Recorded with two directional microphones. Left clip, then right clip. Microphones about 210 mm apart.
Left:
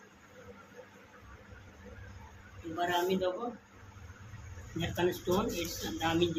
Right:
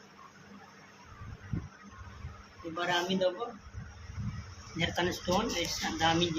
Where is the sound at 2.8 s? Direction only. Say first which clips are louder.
Right 1 dB; 15° right (ahead or behind).